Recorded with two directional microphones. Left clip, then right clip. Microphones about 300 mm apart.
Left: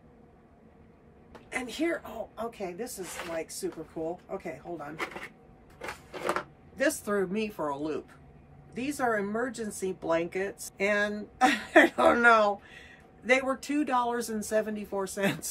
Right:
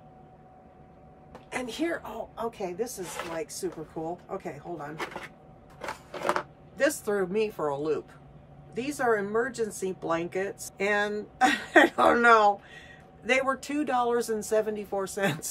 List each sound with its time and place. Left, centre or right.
1.5 s a woman's voice: centre
6.3 s a woman's voice: centre